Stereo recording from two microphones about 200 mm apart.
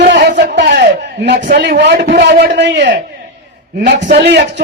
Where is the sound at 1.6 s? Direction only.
55° right (ahead or behind).